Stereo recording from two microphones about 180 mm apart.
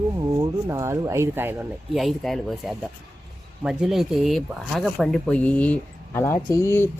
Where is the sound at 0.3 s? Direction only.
15° right (ahead or behind).